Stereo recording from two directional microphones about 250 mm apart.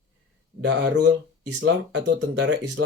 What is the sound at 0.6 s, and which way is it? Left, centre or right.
Speech, right.